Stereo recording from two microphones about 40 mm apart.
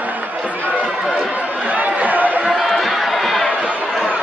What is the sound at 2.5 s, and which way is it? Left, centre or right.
Run, centre.